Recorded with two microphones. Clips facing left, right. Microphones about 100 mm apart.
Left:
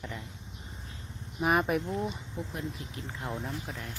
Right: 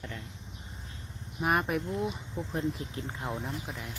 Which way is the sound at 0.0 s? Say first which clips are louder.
Left 1 dB; centre (ahead or behind).